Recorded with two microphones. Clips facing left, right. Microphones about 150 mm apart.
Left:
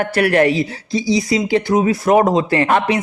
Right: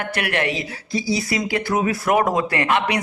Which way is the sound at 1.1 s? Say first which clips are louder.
Left 7 dB; 25° left (ahead or behind).